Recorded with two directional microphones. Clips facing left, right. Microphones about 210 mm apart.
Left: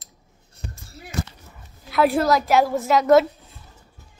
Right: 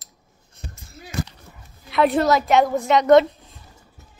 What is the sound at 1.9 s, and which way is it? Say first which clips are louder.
A woman's voice: right 1 dB; centre (ahead or behind).